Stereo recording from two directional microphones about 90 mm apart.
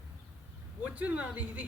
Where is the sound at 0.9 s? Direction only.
15° right (ahead or behind).